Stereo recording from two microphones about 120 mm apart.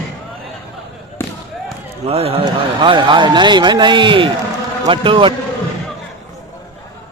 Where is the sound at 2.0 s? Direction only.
55° right (ahead or behind).